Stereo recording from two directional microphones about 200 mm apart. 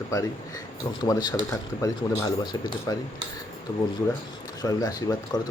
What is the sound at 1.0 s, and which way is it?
Speech, 20° left (ahead or behind).